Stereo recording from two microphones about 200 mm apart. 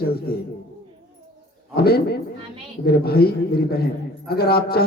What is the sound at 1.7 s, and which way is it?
A man's voice, 50° left (ahead or behind).